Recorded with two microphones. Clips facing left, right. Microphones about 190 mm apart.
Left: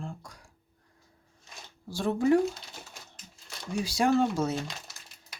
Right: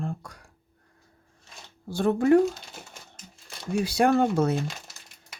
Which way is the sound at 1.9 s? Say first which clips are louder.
Right 4 dB; 60° right (ahead or behind).